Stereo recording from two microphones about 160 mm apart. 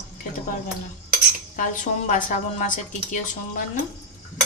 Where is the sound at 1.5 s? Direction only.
55° left (ahead or behind).